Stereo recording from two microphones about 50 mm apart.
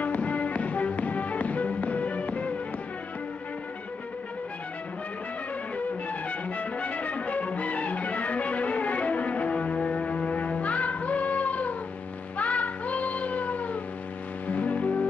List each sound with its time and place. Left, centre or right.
0.0 s music: left
6.0 s music: left
12.4 s child singing: left
14.5 s music: left